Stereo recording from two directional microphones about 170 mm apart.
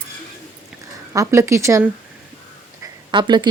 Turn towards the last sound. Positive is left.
turn(degrees=-25)  # may be behind; listen again after turning